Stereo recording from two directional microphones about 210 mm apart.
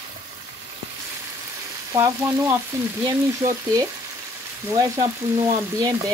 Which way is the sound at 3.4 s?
35° right (ahead or behind).